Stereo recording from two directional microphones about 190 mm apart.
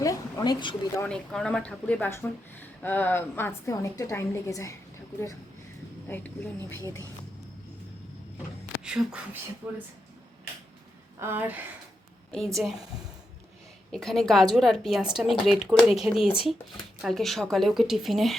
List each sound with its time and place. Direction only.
0.0 s a woman's voice: 20° left (ahead or behind)
0.9 s speech: 5° left (ahead or behind)
6.1 s speech: 10° left (ahead or behind)
8.8 s speech: 5° right (ahead or behind)
11.2 s speech: 10° right (ahead or behind)
12.3 s speech: 5° left (ahead or behind)
13.9 s speech: centre (ahead or behind)